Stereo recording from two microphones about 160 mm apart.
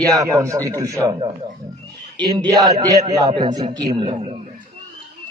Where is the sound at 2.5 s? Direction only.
20° right (ahead or behind).